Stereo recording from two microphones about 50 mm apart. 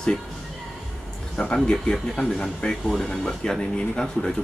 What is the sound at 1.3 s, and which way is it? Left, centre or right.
Speech, centre.